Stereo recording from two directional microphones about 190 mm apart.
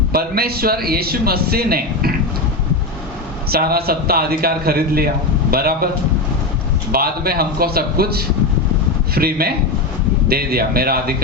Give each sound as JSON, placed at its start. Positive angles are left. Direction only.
{"t": 0.1, "sound": "a man's voice", "side_deg": -55}
{"t": 3.5, "sound": "a man's voice", "side_deg": -55}
{"t": 6.9, "sound": "a man's voice", "side_deg": -50}